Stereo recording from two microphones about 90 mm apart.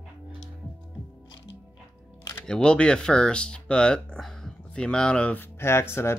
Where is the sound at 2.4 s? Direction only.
10° left (ahead or behind).